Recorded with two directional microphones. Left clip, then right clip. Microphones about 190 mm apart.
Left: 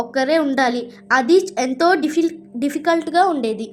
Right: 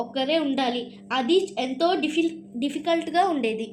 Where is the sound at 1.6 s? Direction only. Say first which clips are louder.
Left 7 dB; 45° left (ahead or behind).